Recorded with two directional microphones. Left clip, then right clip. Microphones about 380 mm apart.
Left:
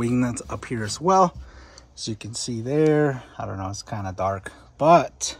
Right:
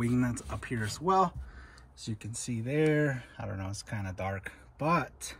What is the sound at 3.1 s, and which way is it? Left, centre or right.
Speech, left.